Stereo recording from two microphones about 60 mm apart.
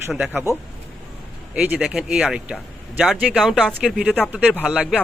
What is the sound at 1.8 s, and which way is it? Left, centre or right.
Speech, centre.